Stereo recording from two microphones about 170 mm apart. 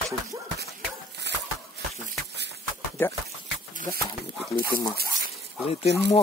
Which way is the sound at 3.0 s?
10° left (ahead or behind).